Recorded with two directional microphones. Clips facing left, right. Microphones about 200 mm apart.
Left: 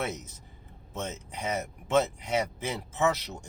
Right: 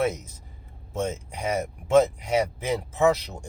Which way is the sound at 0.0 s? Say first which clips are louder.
Right 8 dB; 10° right (ahead or behind).